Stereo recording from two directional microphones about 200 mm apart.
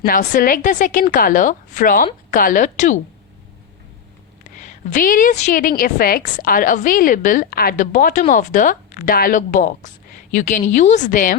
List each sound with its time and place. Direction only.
0.0 s a woman's voice: 45° left (ahead or behind)
4.5 s a woman's voice: 40° left (ahead or behind)